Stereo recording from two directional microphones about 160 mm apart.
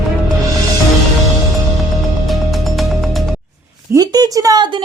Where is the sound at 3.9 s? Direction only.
25° right (ahead or behind).